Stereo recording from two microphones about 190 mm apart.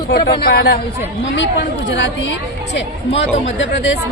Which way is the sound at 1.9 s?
70° left (ahead or behind).